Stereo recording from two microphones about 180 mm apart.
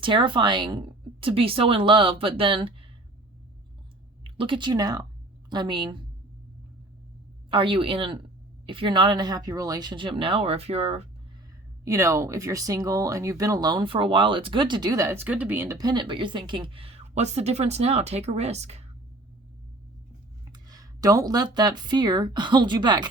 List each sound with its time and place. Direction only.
0.0 s speech: 25° right (ahead or behind)
4.2 s speech: 30° right (ahead or behind)
7.5 s speech: 30° right (ahead or behind)
11.9 s speech: 15° right (ahead or behind); by 18.9 s 35° right (ahead or behind)
20.5 s speech: 20° right (ahead or behind)